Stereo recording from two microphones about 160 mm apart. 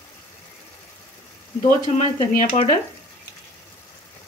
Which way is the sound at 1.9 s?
45° left (ahead or behind).